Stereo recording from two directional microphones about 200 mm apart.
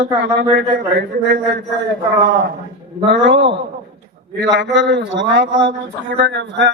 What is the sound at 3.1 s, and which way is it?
A man's voice, 65° right (ahead or behind).